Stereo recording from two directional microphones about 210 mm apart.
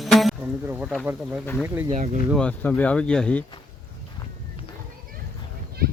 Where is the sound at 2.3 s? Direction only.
5° left (ahead or behind).